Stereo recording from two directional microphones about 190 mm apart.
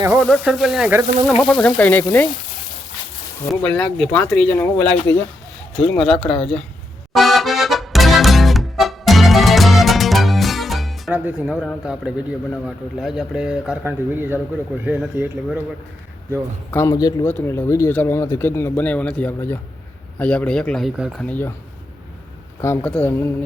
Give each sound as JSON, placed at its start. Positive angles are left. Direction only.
{"t": 0.0, "sound": "speech", "side_deg": -5}
{"t": 1.4, "sound": "speech", "side_deg": 5}
{"t": 3.5, "sound": "speech", "side_deg": 5}
{"t": 6.2, "sound": "speech", "side_deg": 30}
{"t": 7.1, "sound": "accordion", "side_deg": 0}
{"t": 11.8, "sound": "speech", "side_deg": -5}
{"t": 16.7, "sound": "speech", "side_deg": 15}
{"t": 22.6, "sound": "speech", "side_deg": 10}